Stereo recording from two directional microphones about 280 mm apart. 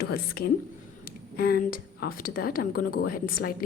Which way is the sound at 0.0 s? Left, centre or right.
Left.